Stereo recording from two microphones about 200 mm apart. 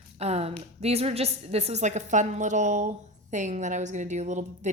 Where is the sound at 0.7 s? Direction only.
30° right (ahead or behind).